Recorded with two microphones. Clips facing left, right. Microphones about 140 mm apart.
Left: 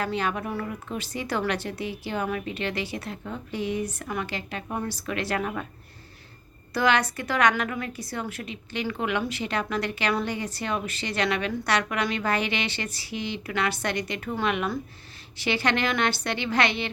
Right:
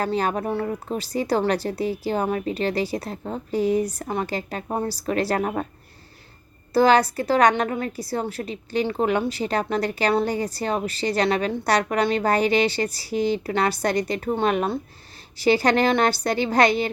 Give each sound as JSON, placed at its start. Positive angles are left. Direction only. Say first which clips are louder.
{"t": 0.0, "sound": "a woman's voice", "louder": "right 4 dB", "side_deg": -40}
{"t": 6.7, "sound": "a woman's voice", "louder": "right 7 dB", "side_deg": -35}